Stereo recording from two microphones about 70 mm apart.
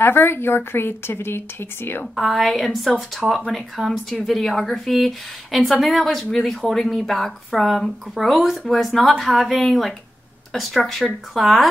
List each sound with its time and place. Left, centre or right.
0.0 s a woman's voice: left
2.1 s a woman's voice: centre